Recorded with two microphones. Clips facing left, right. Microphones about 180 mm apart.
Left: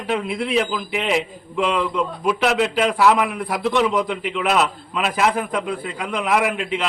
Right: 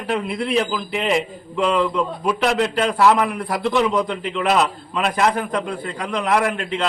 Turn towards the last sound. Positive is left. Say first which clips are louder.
# even
turn(degrees=5)  # may be behind; listen again after turning